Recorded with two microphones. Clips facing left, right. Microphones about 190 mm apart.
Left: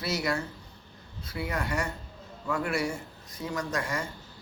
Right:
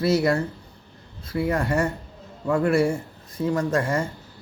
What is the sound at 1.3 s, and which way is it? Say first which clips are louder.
Speech: right 9 dB; 50° right (ahead or behind).